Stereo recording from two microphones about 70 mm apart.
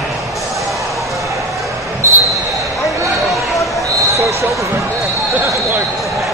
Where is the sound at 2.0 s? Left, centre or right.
Right.